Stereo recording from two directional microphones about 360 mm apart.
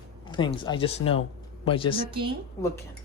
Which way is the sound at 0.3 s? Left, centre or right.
Centre.